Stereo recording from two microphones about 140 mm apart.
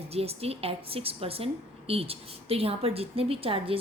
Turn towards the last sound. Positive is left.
turn(degrees=-40)  # may be behind; listen again after turning